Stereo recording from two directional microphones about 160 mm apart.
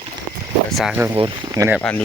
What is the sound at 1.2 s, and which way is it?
Speech, 30° right (ahead or behind).